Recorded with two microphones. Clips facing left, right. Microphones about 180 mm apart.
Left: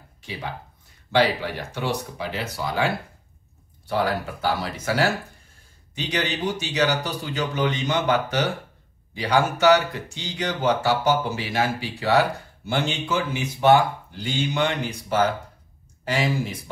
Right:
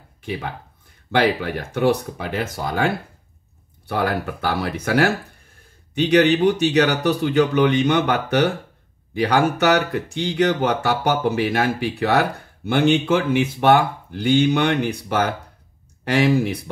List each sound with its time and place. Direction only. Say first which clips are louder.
0.2 s speech: right 5 dB; 55° right (ahead or behind)